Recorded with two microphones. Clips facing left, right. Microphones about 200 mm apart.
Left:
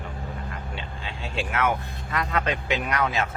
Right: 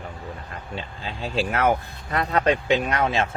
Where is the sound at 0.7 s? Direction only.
40° right (ahead or behind).